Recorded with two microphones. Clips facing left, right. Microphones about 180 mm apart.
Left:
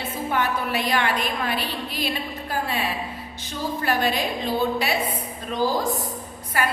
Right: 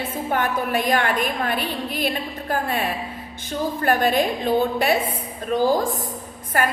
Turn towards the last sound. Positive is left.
turn(degrees=-50)  # may be behind; listen again after turning